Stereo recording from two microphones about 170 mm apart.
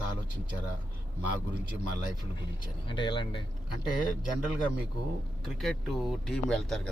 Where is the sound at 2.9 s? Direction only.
25° left (ahead or behind).